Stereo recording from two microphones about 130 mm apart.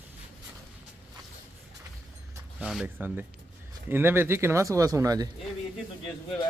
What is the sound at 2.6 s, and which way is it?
Speech, 5° right (ahead or behind).